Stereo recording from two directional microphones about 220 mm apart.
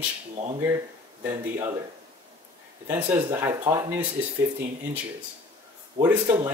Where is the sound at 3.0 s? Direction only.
15° right (ahead or behind).